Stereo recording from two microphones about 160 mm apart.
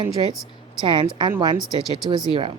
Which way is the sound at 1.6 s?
Centre (ahead or behind).